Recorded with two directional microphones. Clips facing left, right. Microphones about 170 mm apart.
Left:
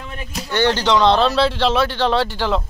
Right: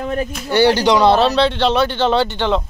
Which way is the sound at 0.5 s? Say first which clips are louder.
Right 4 dB; 10° right (ahead or behind).